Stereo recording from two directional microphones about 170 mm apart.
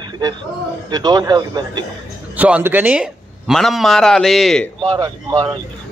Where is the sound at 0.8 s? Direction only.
25° right (ahead or behind).